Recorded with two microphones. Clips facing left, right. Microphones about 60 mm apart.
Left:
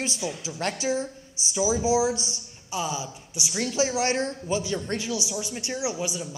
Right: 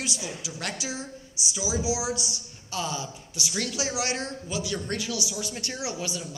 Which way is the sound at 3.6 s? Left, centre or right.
Left.